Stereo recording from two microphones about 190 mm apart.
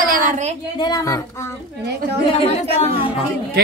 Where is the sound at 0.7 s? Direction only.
20° left (ahead or behind).